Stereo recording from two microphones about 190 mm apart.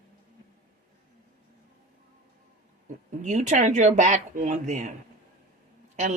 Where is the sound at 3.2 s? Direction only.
40° right (ahead or behind).